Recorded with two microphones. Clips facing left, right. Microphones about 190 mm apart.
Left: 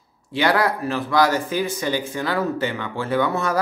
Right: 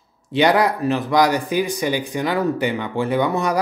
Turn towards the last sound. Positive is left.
turn(degrees=-15)  # may be behind; listen again after turning